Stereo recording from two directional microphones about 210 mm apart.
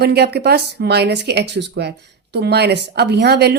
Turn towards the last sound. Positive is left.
turn(degrees=-50)  # may be behind; listen again after turning